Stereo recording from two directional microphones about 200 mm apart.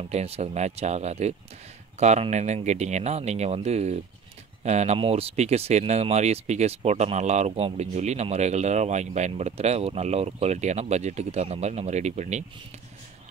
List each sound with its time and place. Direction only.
0.0 s speech: 30° right (ahead or behind)